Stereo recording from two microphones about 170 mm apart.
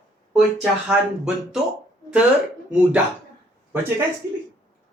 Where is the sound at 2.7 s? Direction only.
10° right (ahead or behind).